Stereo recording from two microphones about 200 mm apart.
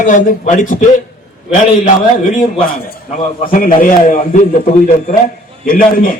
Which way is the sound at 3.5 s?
45° left (ahead or behind).